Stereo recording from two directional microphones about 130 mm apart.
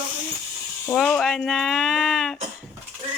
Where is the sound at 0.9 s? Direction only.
5° left (ahead or behind).